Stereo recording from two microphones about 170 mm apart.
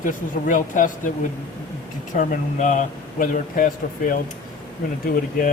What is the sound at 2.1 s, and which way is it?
Speech, 50° left (ahead or behind).